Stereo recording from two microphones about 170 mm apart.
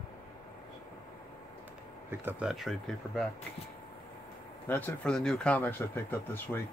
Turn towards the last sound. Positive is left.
turn(degrees=15)  # may be behind; listen again after turning